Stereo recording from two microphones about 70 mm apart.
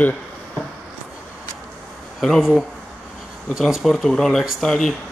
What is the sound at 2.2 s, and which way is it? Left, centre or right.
Speech, centre.